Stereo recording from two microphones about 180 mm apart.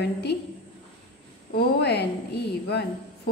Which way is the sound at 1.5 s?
65° left (ahead or behind).